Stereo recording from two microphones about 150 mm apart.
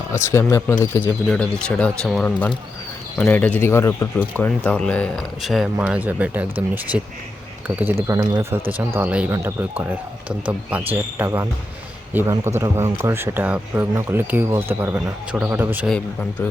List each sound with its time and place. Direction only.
0.1 s speech: 20° left (ahead or behind); by 2.3 s centre (ahead or behind)
3.2 s speech: 10° left (ahead or behind); by 7.1 s 10° right (ahead or behind)
8.0 s speech: 20° right (ahead or behind)
15.9 s speech: 10° left (ahead or behind)